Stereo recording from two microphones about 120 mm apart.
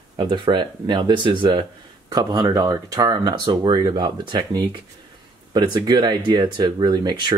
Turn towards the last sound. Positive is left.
turn(degrees=-40)  # may be behind; listen again after turning